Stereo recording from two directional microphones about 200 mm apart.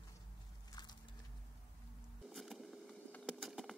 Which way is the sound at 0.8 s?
20° left (ahead or behind).